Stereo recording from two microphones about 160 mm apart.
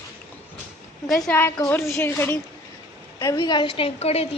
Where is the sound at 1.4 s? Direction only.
15° left (ahead or behind).